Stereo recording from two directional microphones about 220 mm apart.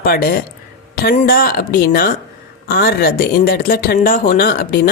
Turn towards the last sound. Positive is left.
turn(degrees=45)  # may be behind; listen again after turning